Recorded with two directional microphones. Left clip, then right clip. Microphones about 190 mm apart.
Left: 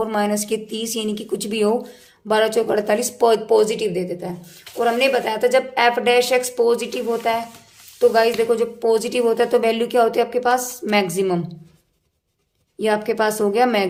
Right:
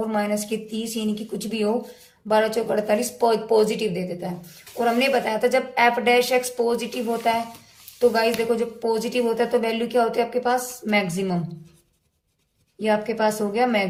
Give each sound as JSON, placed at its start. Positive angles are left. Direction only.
{"t": 0.1, "sound": "speech", "side_deg": 35}
{"t": 12.8, "sound": "speech", "side_deg": 30}